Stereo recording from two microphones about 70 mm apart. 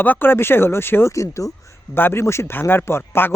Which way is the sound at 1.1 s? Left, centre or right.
Left.